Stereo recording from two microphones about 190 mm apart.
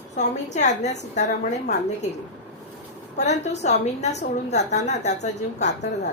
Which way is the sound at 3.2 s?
35° left (ahead or behind).